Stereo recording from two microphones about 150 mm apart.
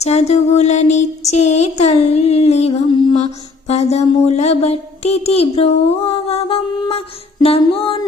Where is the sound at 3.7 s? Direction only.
45° left (ahead or behind).